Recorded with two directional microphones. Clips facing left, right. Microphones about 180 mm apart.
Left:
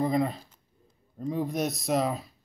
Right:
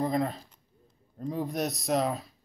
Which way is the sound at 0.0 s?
Centre (ahead or behind).